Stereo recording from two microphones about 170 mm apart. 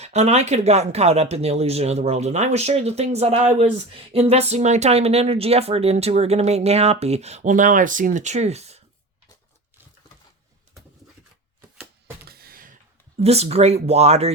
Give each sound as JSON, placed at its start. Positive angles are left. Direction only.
{"t": 0.0, "sound": "speech", "side_deg": -40}
{"t": 12.2, "sound": "a sound", "side_deg": -65}
{"t": 13.1, "sound": "speech", "side_deg": -35}